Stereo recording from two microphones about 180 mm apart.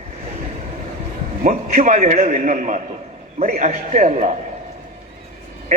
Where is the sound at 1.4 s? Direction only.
45° right (ahead or behind).